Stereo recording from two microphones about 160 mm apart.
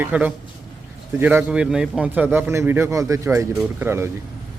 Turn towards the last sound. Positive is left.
turn(degrees=-15)  # may be behind; listen again after turning